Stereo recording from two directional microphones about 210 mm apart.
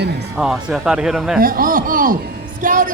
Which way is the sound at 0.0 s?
50° right (ahead or behind).